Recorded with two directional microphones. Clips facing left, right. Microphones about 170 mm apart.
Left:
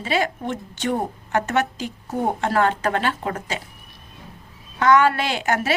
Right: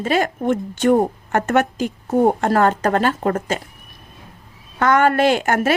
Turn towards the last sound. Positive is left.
turn(degrees=-50)  # may be behind; listen again after turning